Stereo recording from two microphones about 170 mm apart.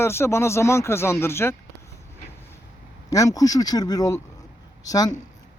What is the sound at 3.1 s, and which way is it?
Speech, 20° left (ahead or behind).